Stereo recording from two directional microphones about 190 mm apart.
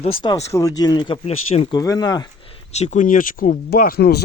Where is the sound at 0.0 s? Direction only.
25° left (ahead or behind).